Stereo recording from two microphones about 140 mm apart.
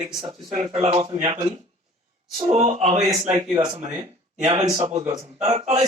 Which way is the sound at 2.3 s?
50° right (ahead or behind).